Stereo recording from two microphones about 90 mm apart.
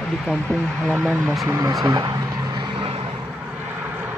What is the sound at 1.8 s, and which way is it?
Vehicle, 50° right (ahead or behind).